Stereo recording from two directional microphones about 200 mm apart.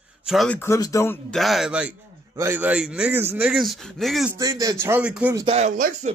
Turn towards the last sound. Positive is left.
turn(degrees=-40)  # may be behind; listen again after turning